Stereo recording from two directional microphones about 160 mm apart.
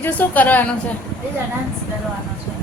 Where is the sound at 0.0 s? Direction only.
10° left (ahead or behind).